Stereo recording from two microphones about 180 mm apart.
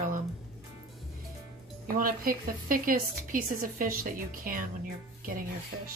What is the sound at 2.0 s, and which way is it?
A woman's voice, 50° right (ahead or behind).